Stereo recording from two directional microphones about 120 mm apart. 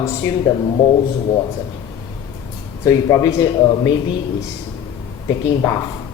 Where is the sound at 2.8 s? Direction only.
30° left (ahead or behind).